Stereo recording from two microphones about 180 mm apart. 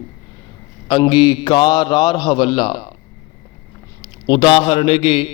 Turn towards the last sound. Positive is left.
turn(degrees=30)  # may be behind; listen again after turning